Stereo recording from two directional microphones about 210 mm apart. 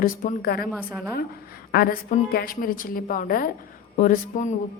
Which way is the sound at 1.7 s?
45° left (ahead or behind).